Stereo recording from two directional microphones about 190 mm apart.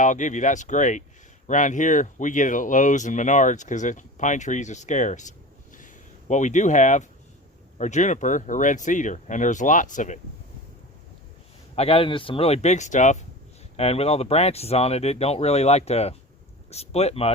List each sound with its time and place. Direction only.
0.0 s speech: 40° left (ahead or behind)
5.7 s a sound: 40° left (ahead or behind)
7.8 s speech: 40° left (ahead or behind)
11.7 s speech: 30° left (ahead or behind)